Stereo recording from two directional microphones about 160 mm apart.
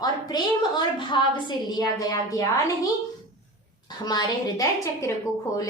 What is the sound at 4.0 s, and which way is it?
A woman's voice, 25° left (ahead or behind).